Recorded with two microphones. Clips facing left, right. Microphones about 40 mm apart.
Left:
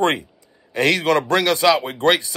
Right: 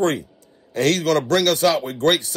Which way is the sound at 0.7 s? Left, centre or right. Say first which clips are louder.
Left 1 dB; left.